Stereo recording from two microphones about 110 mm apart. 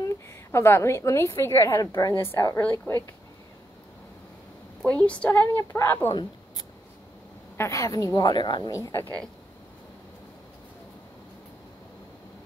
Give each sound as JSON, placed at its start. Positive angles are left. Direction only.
{"t": 0.0, "sound": "a woman's voice", "side_deg": 25}
{"t": 2.6, "sound": "a woman's voice", "side_deg": 15}
{"t": 4.8, "sound": "a woman's voice", "side_deg": 10}
{"t": 7.5, "sound": "a woman's voice", "side_deg": 25}
{"t": 8.7, "sound": "a woman's voice", "side_deg": 25}